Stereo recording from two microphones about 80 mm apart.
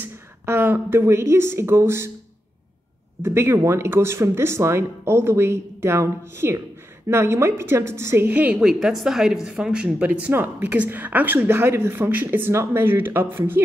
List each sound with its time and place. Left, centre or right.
0.6 s speech: right
3.2 s speech: right
8.3 s speech: centre
8.6 s a woman's voice: centre; by 13.6 s right